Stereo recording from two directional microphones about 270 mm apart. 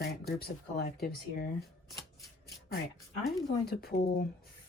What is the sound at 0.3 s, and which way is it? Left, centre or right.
Speech, left.